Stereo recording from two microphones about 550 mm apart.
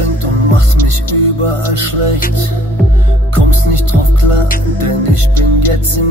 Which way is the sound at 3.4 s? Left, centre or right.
Right.